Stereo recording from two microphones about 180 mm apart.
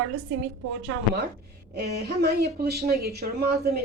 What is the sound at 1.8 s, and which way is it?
Speech, 60° right (ahead or behind).